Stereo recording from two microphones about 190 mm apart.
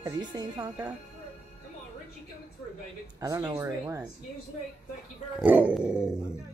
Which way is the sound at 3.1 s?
20° right (ahead or behind).